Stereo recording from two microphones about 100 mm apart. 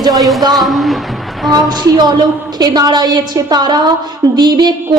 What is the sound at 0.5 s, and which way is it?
Speech, centre (ahead or behind).